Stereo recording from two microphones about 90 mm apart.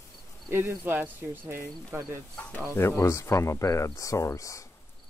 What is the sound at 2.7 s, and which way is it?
Speech, 30° left (ahead or behind).